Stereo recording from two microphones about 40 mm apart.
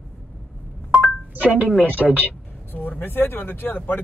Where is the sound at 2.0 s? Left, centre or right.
Centre.